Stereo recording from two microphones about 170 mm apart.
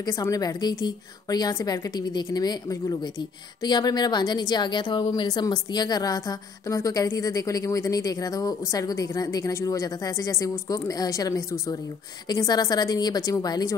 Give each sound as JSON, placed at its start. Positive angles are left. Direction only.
{"t": 0.0, "sound": "a woman's voice", "side_deg": 20}